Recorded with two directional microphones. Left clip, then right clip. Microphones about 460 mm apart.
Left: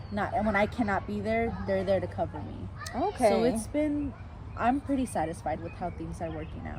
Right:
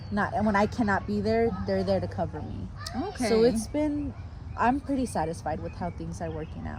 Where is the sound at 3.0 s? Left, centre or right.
Centre.